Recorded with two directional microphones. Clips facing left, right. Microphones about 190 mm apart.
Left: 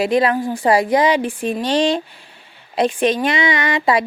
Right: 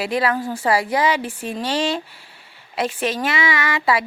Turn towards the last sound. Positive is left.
turn(degrees=20)  # may be behind; listen again after turning